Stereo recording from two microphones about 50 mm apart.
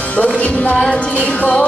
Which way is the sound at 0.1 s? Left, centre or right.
Left.